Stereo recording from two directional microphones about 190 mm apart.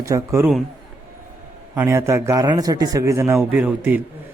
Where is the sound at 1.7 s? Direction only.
15° right (ahead or behind).